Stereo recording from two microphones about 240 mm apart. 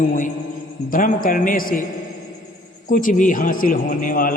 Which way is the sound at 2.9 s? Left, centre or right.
Left.